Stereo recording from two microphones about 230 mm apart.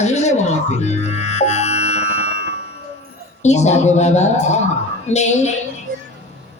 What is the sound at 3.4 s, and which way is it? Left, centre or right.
A woman's voice, left.